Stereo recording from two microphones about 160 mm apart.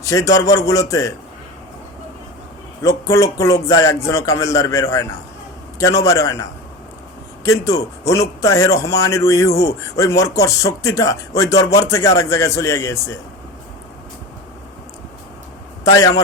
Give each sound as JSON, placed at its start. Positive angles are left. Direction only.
{"t": 0.0, "sound": "speech", "side_deg": 20}
{"t": 2.8, "sound": "speech", "side_deg": 20}
{"t": 7.4, "sound": "speech", "side_deg": 20}
{"t": 15.8, "sound": "a man's voice", "side_deg": 20}